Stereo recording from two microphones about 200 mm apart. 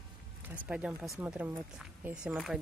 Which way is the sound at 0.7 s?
5° right (ahead or behind).